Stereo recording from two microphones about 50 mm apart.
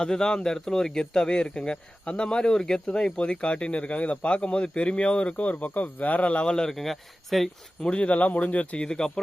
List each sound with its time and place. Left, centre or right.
0.0 s speech: centre
6.5 s speech: centre
7.8 s speech: left
8.9 s speech: centre